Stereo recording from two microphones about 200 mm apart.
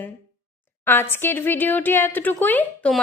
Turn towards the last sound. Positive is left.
turn(degrees=5)  # may be behind; listen again after turning